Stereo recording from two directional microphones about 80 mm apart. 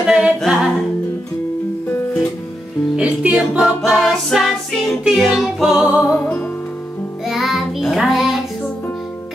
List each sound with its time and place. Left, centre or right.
0.0 s humming: centre
1.9 s music: left
3.0 s music: centre
6.1 s music: centre
7.2 s child singing: centre